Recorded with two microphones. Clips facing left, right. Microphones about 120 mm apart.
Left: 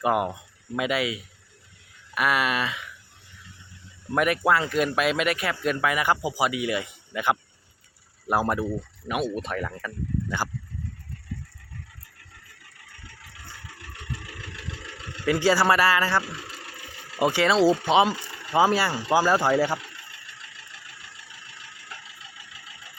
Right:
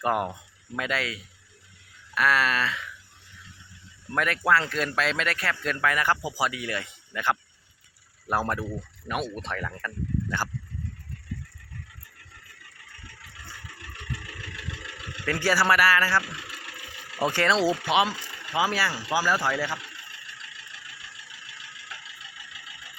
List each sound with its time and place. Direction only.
0.0 s speech: 5° left (ahead or behind)
4.1 s speech: 15° left (ahead or behind)
15.3 s speech: 20° left (ahead or behind)
18.5 s speech: 30° left (ahead or behind)